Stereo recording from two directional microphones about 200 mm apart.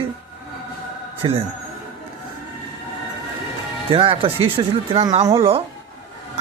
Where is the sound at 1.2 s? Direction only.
25° right (ahead or behind).